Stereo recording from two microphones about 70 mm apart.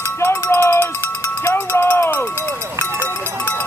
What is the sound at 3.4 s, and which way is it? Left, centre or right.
Music, left.